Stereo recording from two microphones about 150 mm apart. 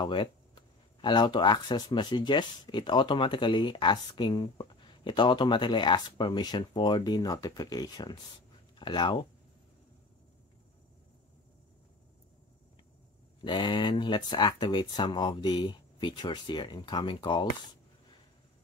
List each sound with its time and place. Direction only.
0.0 s speech: 35° left (ahead or behind)
13.4 s speech: 30° left (ahead or behind)